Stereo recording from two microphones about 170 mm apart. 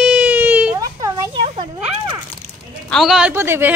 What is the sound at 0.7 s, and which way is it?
Speech, 20° right (ahead or behind).